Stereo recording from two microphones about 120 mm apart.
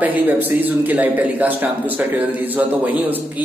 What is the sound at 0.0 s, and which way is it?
Speech, 15° right (ahead or behind).